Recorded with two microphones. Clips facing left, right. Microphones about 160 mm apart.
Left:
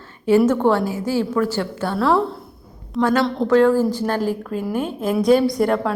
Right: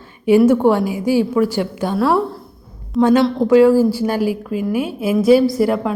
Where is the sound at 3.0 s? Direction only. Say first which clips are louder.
Right 5 dB; 20° right (ahead or behind).